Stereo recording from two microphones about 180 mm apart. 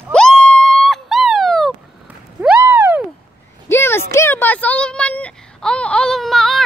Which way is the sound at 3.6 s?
15° left (ahead or behind).